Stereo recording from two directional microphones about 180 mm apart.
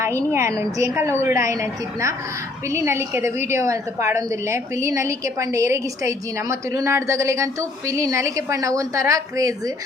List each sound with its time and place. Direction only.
0.3 s a woman's voice: 15° right (ahead or behind)